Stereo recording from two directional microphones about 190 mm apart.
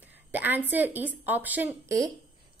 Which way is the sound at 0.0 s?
10° right (ahead or behind).